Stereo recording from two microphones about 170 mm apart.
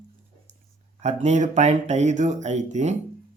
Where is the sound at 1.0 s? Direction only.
45° right (ahead or behind).